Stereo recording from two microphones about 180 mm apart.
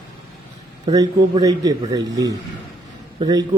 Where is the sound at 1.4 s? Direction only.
20° right (ahead or behind).